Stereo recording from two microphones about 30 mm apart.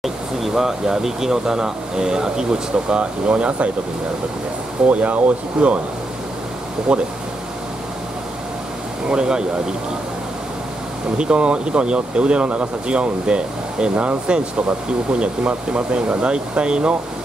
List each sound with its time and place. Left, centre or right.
0.6 s speech: centre; by 3.7 s right
4.8 s speech: right
5.6 s speech: right
6.9 s speech: right
9.1 s speech: right
11.1 s speech: right